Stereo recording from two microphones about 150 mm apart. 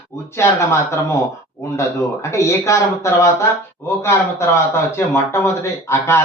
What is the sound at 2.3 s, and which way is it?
A man's voice, 20° left (ahead or behind).